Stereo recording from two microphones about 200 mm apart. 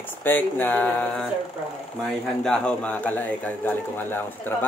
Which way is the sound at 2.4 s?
5° left (ahead or behind).